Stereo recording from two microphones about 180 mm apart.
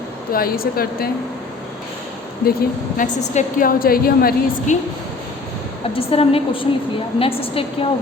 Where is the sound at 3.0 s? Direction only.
45° left (ahead or behind).